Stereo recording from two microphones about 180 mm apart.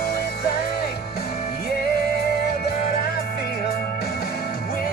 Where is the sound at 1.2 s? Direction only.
60° left (ahead or behind).